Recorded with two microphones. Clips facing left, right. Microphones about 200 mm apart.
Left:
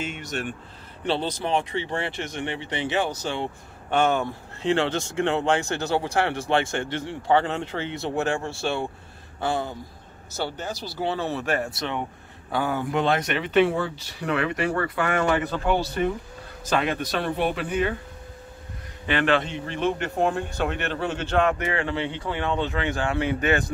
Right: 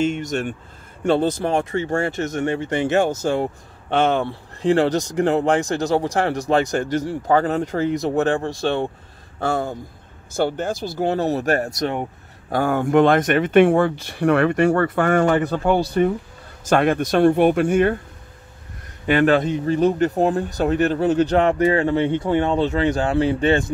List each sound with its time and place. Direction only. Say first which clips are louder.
0.0 s speech: right 9 dB; 45° right (ahead or behind)
4.1 s speech: right 4 dB; 35° right (ahead or behind)
19.0 s speech: right 6 dB; 40° right (ahead or behind)